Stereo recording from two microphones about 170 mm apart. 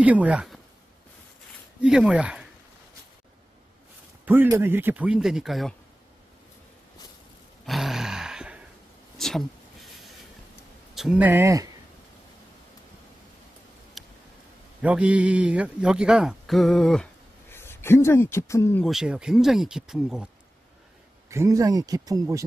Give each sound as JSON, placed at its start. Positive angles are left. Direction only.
{"t": 0.0, "sound": "speech", "side_deg": -10}
{"t": 1.8, "sound": "speech", "side_deg": -5}
{"t": 4.3, "sound": "a man's voice", "side_deg": -10}
{"t": 7.6, "sound": "a sound", "side_deg": 0}
{"t": 11.0, "sound": "a man's voice", "side_deg": -10}
{"t": 14.0, "sound": "a sound", "side_deg": 0}
{"t": 14.8, "sound": "a man's voice", "side_deg": -5}
{"t": 18.9, "sound": "speech", "side_deg": -5}
{"t": 21.3, "sound": "speech", "side_deg": -20}